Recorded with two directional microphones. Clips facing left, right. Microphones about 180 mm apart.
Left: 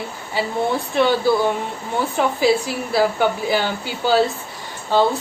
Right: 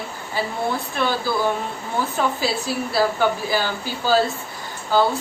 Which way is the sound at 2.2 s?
15° left (ahead or behind).